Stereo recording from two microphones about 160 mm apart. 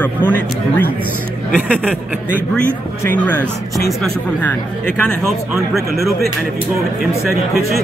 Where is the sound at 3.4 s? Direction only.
Centre (ahead or behind).